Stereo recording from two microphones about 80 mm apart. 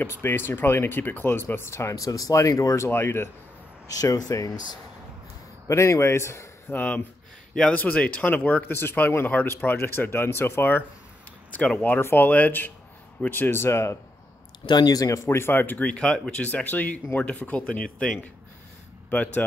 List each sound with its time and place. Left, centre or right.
0.0 s speech: left
2.9 s speech: left
3.8 s speech: left
5.7 s speech: left
6.7 s speech: left
11.5 s speech: centre
11.8 s speech: left
14.7 s speech: left
15.2 s speech: left
19.0 s speech: left